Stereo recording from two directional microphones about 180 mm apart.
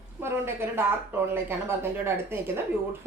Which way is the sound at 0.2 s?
15° right (ahead or behind).